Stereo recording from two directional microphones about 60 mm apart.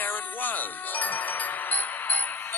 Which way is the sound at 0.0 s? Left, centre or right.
Left.